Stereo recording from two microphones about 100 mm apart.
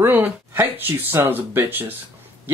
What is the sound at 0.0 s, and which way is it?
Speech, 20° right (ahead or behind).